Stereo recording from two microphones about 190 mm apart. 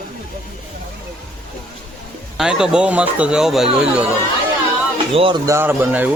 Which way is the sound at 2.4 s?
5° right (ahead or behind).